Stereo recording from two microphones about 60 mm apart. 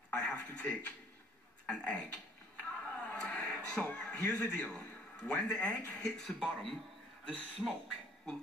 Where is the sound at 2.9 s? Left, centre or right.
Centre.